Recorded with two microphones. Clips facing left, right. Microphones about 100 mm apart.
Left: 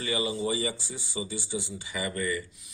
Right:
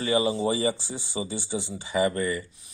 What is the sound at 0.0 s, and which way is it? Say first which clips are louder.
Speech: right 6 dB; 35° right (ahead or behind).